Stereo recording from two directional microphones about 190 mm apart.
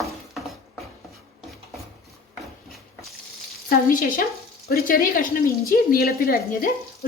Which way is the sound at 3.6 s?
50° left (ahead or behind).